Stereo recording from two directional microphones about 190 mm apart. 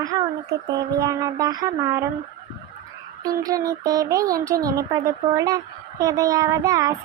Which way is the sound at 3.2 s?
20° right (ahead or behind).